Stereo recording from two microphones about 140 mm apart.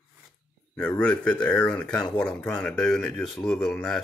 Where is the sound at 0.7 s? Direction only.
10° left (ahead or behind).